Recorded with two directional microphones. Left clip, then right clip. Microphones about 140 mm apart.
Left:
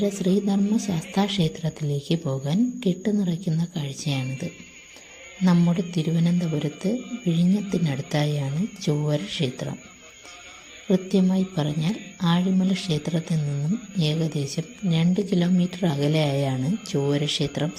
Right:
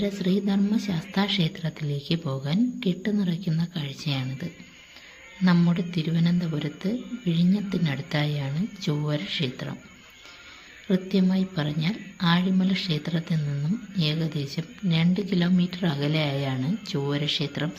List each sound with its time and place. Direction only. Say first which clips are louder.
0.0 s speech: left 3 dB; 20° left (ahead or behind)
5.5 s speech: left 1 dB; 15° left (ahead or behind)
10.9 s speech: left 3 dB; 25° left (ahead or behind)